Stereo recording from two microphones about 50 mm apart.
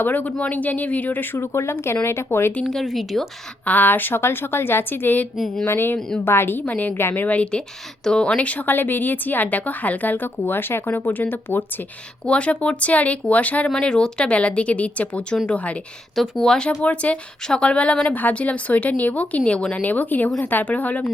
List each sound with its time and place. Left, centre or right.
0.0 s a woman's voice: left
1.4 s speech: left
2.6 s speech: centre
3.7 s a woman's voice: left
7.3 s a woman's voice: left
12.2 s speech: left
13.7 s speech: centre
16.1 s speech: centre
16.8 s speech: left
18.1 s a woman's voice: left